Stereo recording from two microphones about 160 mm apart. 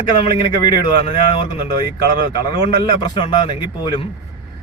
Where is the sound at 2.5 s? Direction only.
30° left (ahead or behind).